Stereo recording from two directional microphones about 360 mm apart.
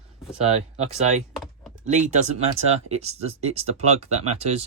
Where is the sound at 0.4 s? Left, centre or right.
Centre.